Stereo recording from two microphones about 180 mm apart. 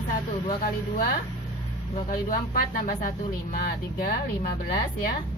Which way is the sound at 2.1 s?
50° left (ahead or behind).